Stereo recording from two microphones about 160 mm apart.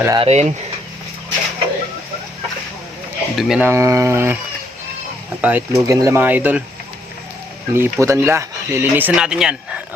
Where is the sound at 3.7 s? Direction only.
20° right (ahead or behind).